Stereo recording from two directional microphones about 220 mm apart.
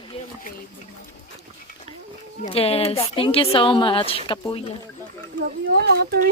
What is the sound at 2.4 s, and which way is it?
A woman's voice, 25° left (ahead or behind).